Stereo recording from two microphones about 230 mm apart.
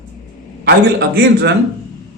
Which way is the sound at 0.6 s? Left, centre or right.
Right.